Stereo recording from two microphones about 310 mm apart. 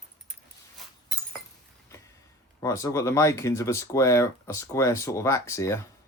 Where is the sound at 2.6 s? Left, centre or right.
Centre.